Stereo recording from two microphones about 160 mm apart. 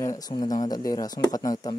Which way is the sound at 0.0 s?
20° left (ahead or behind).